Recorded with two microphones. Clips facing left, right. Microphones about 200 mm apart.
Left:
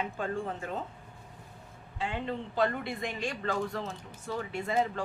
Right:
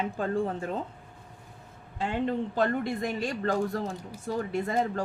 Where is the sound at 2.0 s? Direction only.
45° right (ahead or behind).